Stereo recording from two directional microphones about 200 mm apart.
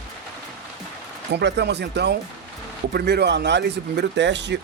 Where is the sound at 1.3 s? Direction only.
60° right (ahead or behind).